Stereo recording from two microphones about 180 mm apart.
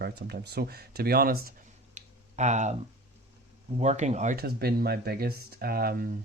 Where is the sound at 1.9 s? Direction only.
40° right (ahead or behind).